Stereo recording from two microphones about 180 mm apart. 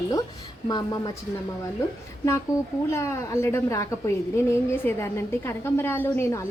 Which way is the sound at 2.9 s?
15° left (ahead or behind).